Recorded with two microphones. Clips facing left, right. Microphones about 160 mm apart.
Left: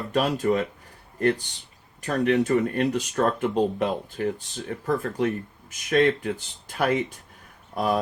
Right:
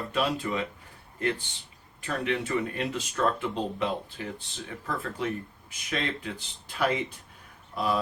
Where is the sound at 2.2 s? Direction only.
45° left (ahead or behind).